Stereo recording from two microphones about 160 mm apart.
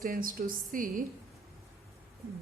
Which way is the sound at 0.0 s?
60° right (ahead or behind).